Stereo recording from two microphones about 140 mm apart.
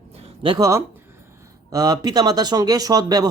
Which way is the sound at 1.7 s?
25° right (ahead or behind).